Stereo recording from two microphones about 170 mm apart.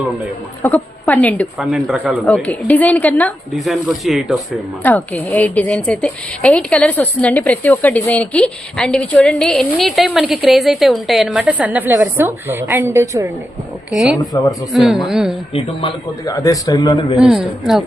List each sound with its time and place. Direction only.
0.6 s a woman's voice: 10° left (ahead or behind)
1.5 s a woman's voice: centre (ahead or behind)
2.3 s a woman's voice: 10° left (ahead or behind)
4.8 s a woman's voice: 10° left (ahead or behind); by 13.3 s 15° right (ahead or behind)
13.9 s a woman's voice: centre (ahead or behind)
16.2 s a man's voice: 20° left (ahead or behind)
17.2 s a woman's voice: 5° right (ahead or behind)